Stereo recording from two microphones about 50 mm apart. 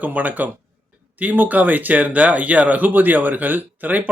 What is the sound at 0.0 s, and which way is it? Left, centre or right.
Speech, right.